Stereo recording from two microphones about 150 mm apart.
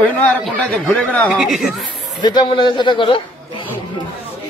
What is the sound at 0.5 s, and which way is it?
A man's voice, centre (ahead or behind).